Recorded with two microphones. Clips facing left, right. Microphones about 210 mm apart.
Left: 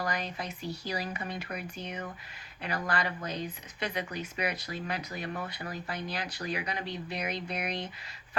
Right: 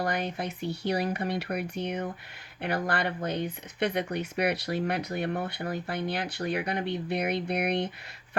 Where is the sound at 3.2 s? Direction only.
60° right (ahead or behind).